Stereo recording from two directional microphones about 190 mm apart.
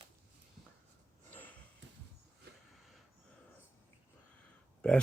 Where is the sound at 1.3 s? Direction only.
10° left (ahead or behind).